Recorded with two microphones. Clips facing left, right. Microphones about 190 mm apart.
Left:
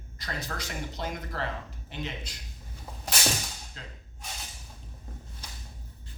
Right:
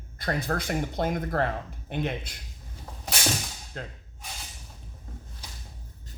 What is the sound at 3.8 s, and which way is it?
Speech, 55° right (ahead or behind).